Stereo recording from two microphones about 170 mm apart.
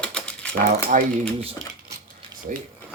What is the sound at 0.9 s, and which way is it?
Speech, 50° right (ahead or behind).